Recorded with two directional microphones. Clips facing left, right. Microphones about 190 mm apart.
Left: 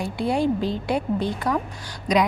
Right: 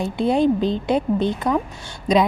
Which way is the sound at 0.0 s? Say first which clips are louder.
Right 4 dB; 20° right (ahead or behind).